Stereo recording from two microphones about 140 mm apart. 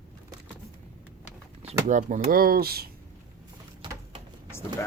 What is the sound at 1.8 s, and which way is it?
Speech, 60° right (ahead or behind).